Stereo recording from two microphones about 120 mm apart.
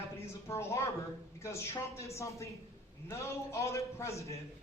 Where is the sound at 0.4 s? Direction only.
25° left (ahead or behind).